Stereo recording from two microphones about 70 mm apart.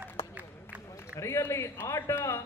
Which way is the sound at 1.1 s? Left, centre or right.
Left.